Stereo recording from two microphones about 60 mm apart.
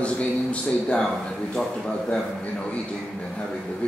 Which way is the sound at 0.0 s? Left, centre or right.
Centre.